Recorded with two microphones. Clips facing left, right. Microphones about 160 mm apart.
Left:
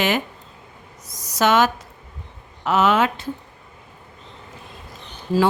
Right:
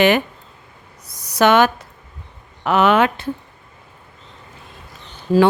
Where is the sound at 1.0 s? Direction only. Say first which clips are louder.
Right 4 dB; 60° right (ahead or behind).